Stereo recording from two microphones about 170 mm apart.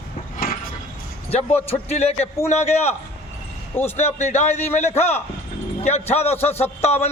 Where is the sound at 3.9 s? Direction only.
40° left (ahead or behind).